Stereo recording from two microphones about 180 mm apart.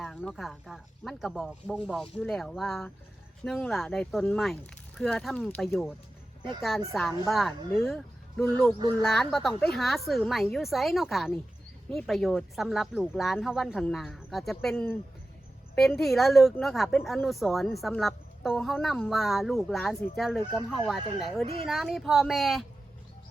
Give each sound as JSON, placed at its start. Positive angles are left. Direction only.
{"t": 0.0, "sound": "a woman's voice", "side_deg": 5}